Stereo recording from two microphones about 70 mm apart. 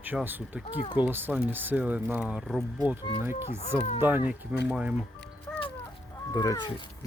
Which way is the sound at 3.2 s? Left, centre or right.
Right.